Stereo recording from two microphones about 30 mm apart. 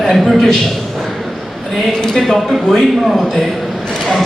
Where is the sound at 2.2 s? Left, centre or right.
Centre.